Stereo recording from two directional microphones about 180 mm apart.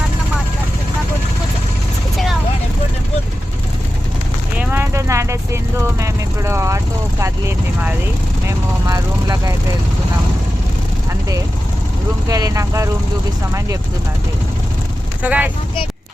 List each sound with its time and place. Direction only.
4.5 s speech: 10° right (ahead or behind)
8.4 s speech: 20° right (ahead or behind)
12.3 s speech: 20° right (ahead or behind)
15.2 s speech: 10° right (ahead or behind)